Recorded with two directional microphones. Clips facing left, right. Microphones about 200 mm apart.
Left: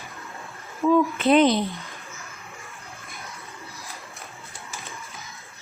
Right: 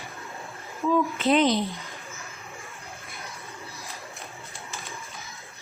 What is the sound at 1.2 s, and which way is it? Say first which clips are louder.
Speech: left 4 dB; 55° left (ahead or behind).